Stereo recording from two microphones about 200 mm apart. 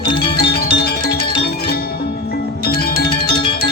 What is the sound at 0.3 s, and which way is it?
Music, 50° left (ahead or behind).